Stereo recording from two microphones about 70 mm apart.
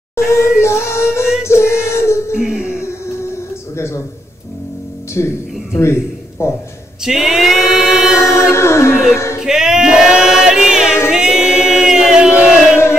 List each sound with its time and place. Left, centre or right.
0.1 s a sound: left
1.4 s music: left
2.3 s a sound: centre
3.7 s music: left
5.2 s speech: left
6.4 s music: left
7.1 s chant: centre
8.2 s music: left
9.4 s choir: centre
11.1 s chant: centre